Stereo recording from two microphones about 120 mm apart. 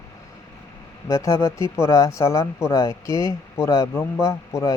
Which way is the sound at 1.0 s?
25° left (ahead or behind).